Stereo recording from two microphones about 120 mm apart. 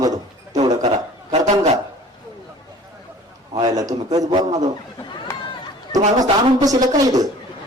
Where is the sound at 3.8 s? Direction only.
30° right (ahead or behind).